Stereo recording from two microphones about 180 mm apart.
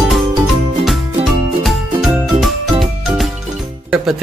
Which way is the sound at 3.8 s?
Centre (ahead or behind).